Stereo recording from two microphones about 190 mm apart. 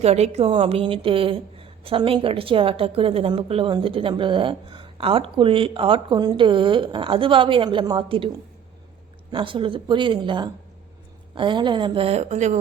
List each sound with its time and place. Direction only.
0.0 s a woman's voice: 35° right (ahead or behind)
9.3 s a woman's voice: 25° right (ahead or behind)